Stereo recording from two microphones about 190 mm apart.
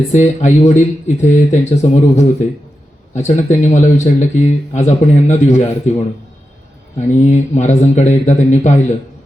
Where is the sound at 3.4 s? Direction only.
40° left (ahead or behind).